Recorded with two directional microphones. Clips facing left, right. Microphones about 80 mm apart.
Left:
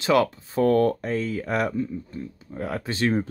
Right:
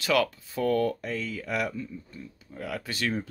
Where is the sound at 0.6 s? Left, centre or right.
Left.